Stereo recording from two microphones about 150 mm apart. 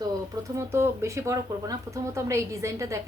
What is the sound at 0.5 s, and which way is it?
Speech, 15° right (ahead or behind).